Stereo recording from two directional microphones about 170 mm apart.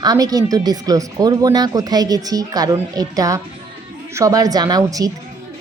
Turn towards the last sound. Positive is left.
turn(degrees=-20)  # may be behind; listen again after turning